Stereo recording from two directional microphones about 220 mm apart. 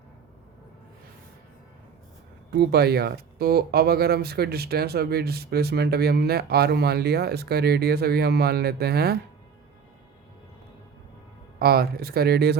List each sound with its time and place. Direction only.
2.5 s speech: 45° right (ahead or behind)
11.6 s speech: 45° right (ahead or behind)